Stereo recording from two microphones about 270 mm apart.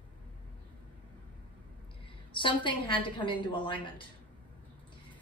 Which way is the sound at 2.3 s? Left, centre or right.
Centre.